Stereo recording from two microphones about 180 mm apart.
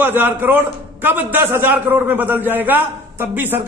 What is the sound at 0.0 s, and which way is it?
A man's voice, 10° right (ahead or behind).